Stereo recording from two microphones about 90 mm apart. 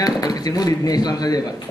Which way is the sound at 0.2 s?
45° left (ahead or behind).